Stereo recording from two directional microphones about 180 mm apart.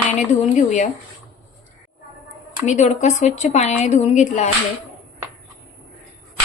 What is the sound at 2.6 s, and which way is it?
A woman's voice, 40° left (ahead or behind).